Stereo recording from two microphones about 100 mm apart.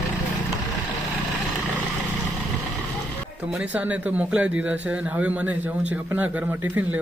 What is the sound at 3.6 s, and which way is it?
Speech, 15° right (ahead or behind).